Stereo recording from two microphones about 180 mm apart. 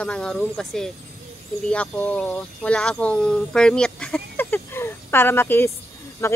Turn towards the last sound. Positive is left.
turn(degrees=15)  # may be behind; listen again after turning